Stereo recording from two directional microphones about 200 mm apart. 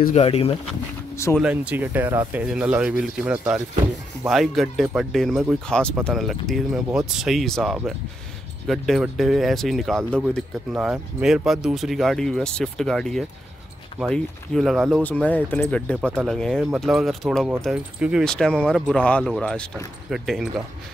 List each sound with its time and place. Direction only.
0.1 s speech: 30° left (ahead or behind)
1.1 s speech: 15° left (ahead or behind)
1.4 s speech: 5° right (ahead or behind)